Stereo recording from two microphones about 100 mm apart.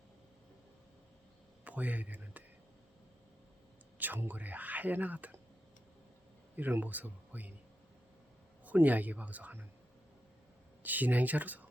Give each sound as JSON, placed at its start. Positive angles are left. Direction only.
{"t": 1.6, "sound": "a sound", "side_deg": -15}
{"t": 3.9, "sound": "speech", "side_deg": -15}
{"t": 6.6, "sound": "speech", "side_deg": -20}
{"t": 8.6, "sound": "speech", "side_deg": -15}
{"t": 10.8, "sound": "speech", "side_deg": -15}